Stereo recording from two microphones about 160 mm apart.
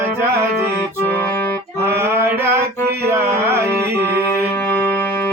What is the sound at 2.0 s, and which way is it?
Mantra, 15° right (ahead or behind).